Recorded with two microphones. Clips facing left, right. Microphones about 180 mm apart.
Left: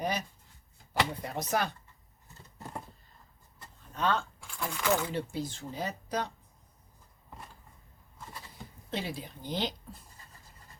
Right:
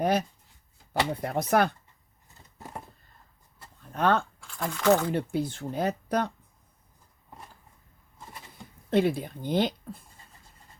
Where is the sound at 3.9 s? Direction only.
55° right (ahead or behind).